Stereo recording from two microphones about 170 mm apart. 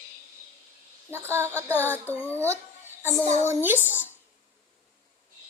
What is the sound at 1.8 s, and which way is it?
Child singing, 10° left (ahead or behind).